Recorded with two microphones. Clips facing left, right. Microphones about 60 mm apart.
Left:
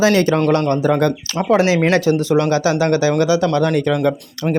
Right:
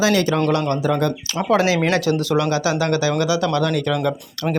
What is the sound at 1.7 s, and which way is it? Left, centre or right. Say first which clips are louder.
Speech: left 4 dB; left.